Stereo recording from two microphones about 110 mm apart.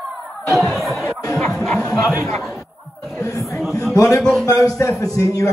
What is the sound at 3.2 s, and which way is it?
Chatter, 30° left (ahead or behind).